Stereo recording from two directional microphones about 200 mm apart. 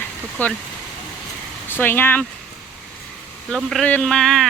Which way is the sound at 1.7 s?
10° left (ahead or behind).